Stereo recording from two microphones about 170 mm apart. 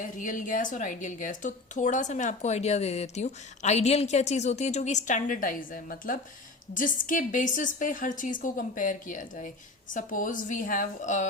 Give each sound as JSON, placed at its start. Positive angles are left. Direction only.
{"t": 0.0, "sound": "a woman's voice", "side_deg": 50}